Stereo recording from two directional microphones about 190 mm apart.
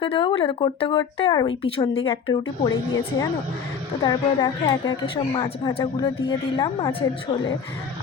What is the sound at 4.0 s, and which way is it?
Speech, 20° left (ahead or behind).